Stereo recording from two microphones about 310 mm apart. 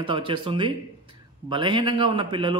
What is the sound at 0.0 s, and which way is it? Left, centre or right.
A man's voice, centre.